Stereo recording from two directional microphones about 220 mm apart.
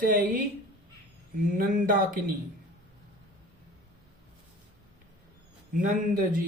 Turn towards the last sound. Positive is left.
turn(degrees=-40)  # may be behind; listen again after turning